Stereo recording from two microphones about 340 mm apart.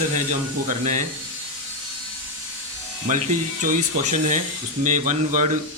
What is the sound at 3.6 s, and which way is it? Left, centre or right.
Speech, right.